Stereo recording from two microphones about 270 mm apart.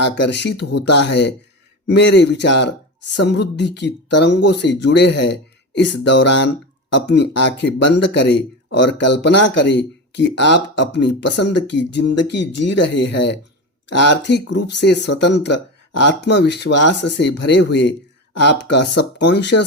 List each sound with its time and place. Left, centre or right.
0.0 s speech: left